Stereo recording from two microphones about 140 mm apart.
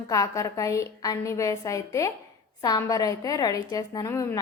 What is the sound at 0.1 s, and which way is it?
A woman's voice, 25° left (ahead or behind).